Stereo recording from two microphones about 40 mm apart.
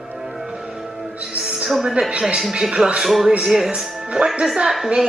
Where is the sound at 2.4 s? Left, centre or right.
Centre.